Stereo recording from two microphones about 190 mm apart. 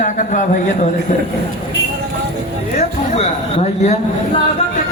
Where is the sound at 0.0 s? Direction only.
45° left (ahead or behind).